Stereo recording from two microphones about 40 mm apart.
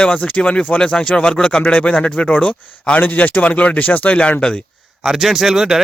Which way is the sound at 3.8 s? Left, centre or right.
Left.